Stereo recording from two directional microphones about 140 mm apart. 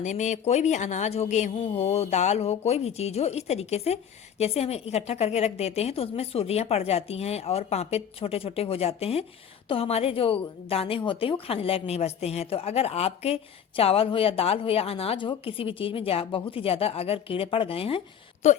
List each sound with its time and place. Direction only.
0.0 s a woman's voice: 60° left (ahead or behind); by 18.0 s 45° left (ahead or behind)
18.4 s speech: 55° left (ahead or behind)